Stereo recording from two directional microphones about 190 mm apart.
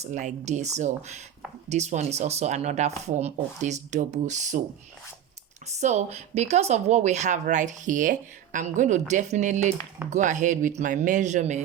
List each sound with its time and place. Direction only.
0.0 s speech: 40° right (ahead or behind)
5.6 s speech: 35° right (ahead or behind)